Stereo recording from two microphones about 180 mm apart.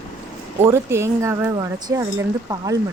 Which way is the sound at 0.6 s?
15° right (ahead or behind).